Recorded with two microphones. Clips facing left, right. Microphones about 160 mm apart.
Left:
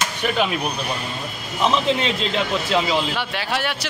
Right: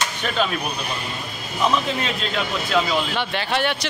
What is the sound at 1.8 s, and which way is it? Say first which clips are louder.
Speech: left 4 dB; 25° left (ahead or behind).